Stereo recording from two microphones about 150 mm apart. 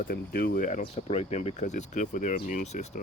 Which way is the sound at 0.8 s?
45° left (ahead or behind).